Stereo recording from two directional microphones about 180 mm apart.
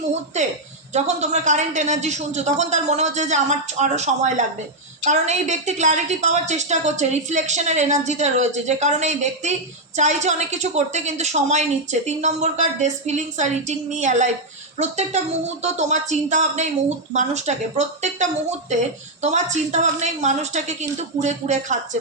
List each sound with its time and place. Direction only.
0.9 s a woman's voice: 40° right (ahead or behind)